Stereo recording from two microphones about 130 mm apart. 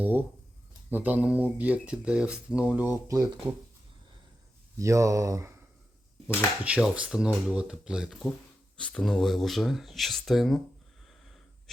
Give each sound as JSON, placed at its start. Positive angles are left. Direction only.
{"t": 0.0, "sound": "speech", "side_deg": -15}
{"t": 4.8, "sound": "speech", "side_deg": -25}
{"t": 6.2, "sound": "speech", "side_deg": -10}
{"t": 8.8, "sound": "speech", "side_deg": 10}